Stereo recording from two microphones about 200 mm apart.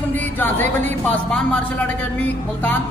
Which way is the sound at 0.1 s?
10° left (ahead or behind).